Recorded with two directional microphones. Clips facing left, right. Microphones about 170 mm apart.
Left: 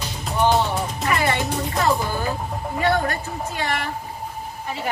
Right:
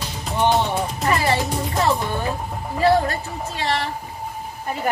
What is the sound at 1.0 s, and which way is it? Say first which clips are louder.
Music: right 2 dB; 30° right (ahead or behind).